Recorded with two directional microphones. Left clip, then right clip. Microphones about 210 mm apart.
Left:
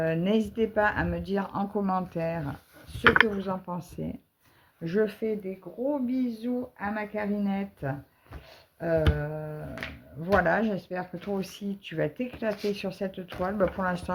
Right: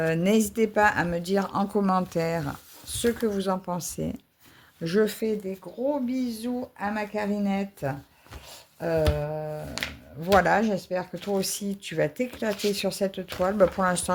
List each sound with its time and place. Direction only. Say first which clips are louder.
0.0 s speech: right 3 dB; 40° right (ahead or behind)